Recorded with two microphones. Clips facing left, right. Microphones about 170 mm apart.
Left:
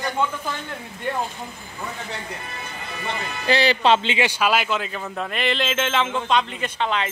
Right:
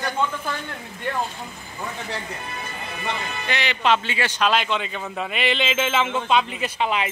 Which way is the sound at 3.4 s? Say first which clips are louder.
Left 5 dB; 35° left (ahead or behind).